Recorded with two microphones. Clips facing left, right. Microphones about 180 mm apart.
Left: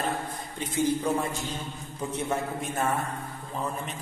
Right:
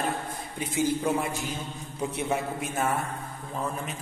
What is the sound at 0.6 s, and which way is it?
A man's voice, 10° right (ahead or behind).